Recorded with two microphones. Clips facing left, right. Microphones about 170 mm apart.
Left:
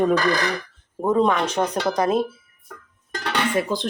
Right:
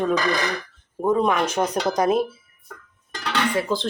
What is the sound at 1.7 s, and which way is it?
Speech, 20° right (ahead or behind).